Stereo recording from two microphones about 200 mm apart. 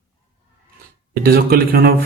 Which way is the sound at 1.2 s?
50° right (ahead or behind).